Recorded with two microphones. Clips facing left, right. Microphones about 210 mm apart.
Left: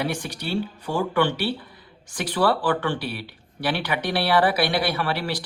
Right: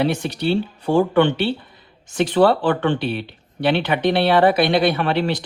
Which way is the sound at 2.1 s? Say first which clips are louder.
Right 7 dB; 25° right (ahead or behind).